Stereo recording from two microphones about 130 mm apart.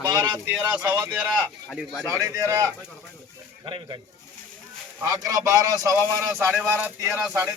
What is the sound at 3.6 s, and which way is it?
Speech, 40° right (ahead or behind).